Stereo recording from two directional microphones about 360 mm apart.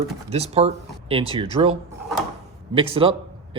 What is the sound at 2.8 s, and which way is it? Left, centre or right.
Speech, centre.